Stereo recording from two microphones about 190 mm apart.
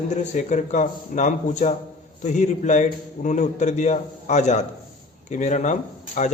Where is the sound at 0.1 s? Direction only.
40° left (ahead or behind).